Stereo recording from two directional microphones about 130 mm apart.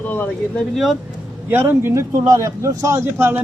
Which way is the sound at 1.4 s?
15° right (ahead or behind).